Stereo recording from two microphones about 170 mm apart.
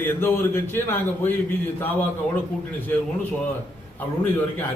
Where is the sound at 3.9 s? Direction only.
10° left (ahead or behind).